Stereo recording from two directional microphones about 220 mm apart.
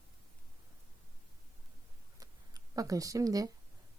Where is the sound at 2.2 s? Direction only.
15° right (ahead or behind).